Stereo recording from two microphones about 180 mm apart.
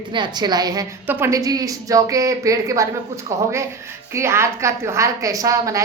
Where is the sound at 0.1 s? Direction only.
25° right (ahead or behind).